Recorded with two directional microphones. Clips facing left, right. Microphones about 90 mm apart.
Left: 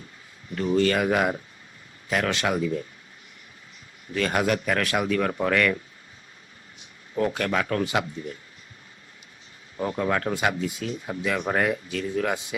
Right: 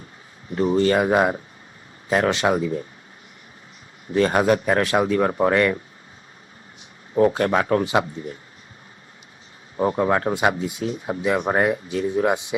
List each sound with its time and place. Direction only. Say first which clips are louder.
0.5 s speech: right 4 dB; 30° right (ahead or behind)
4.1 s speech: right 6 dB; 30° right (ahead or behind)
7.1 s speech: right 7 dB; 30° right (ahead or behind)
9.7 s speech: right 6 dB; 30° right (ahead or behind)